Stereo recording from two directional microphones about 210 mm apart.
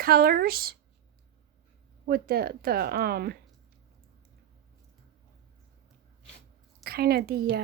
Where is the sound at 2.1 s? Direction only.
45° right (ahead or behind).